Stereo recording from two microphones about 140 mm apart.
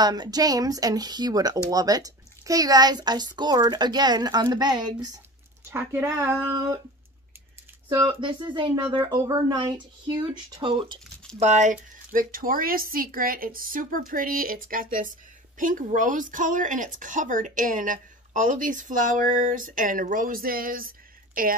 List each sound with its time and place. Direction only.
0.0 s speech: 30° right (ahead or behind)
5.7 s a woman's voice: 15° right (ahead or behind)
7.9 s speech: 30° right (ahead or behind)
9.0 s speech: 20° right (ahead or behind)
11.3 s speech: 55° right (ahead or behind); by 15.0 s 85° right
15.5 s a woman's voice: 70° right (ahead or behind); by 21.5 s 90° right